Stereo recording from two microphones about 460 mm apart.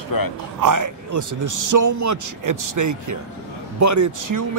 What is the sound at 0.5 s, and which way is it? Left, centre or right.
Speech, right.